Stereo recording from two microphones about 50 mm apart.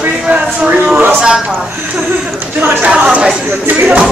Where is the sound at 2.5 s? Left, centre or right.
Right.